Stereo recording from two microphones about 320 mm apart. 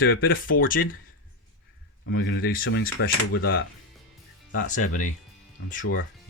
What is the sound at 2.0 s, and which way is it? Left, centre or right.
Speech, left.